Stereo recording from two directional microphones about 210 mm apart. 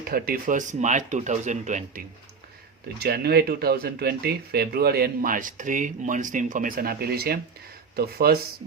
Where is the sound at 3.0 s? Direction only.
50° right (ahead or behind).